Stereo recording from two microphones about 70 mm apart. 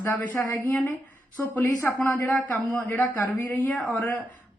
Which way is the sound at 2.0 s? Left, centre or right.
Left.